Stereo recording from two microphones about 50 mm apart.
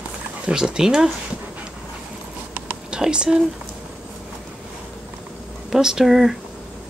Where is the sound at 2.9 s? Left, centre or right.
Centre.